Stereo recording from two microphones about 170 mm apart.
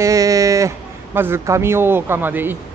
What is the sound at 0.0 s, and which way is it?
A man's voice, 20° right (ahead or behind).